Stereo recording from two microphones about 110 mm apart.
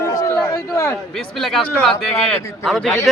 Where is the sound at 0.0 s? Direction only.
30° left (ahead or behind).